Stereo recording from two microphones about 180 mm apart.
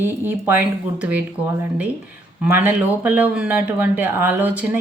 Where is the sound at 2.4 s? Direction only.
10° right (ahead or behind).